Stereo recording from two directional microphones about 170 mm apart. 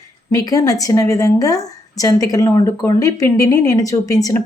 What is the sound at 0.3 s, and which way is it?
A woman's voice, 20° left (ahead or behind).